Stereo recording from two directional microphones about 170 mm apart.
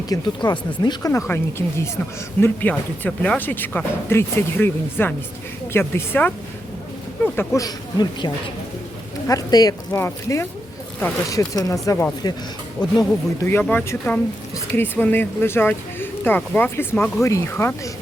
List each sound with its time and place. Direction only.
0.1 s speech: 25° left (ahead or behind)
7.3 s speech: 20° left (ahead or behind)